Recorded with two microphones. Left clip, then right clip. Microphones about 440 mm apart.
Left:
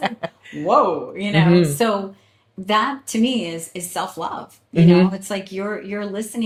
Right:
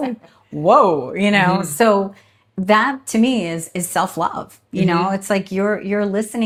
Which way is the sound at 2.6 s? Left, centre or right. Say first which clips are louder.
Right 4 dB; right.